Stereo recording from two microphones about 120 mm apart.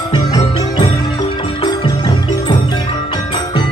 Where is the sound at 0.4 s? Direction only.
45° left (ahead or behind).